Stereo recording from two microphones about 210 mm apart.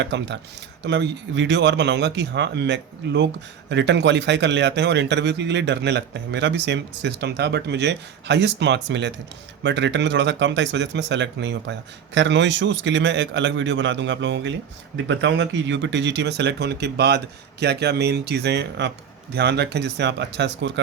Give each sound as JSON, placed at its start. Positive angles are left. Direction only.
{"t": 0.0, "sound": "a man's voice", "side_deg": -55}